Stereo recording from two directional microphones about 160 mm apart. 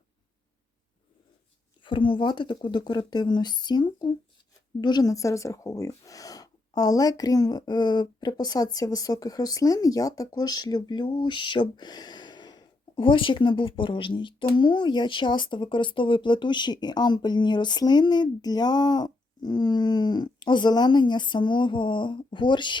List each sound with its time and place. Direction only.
1.8 s speech: 30° left (ahead or behind)